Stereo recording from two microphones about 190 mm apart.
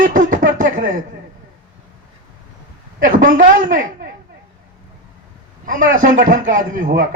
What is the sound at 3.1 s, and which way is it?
A man's voice, 45° right (ahead or behind).